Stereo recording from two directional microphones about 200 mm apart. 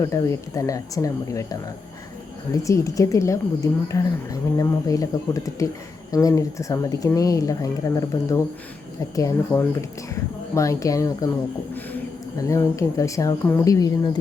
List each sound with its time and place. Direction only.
0.0 s speech: 15° left (ahead or behind)
12.4 s speech: 15° left (ahead or behind)